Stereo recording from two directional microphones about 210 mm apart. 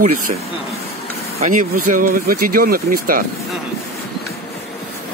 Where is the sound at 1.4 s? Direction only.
40° right (ahead or behind).